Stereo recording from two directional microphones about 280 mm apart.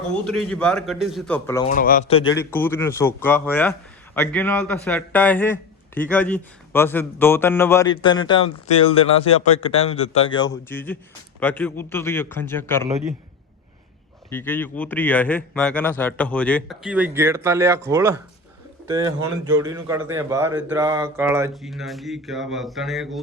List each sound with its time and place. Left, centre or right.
0.1 s a man's voice: centre
1.6 s a man's voice: left
2.3 s a man's voice: centre
14.3 s a man's voice: centre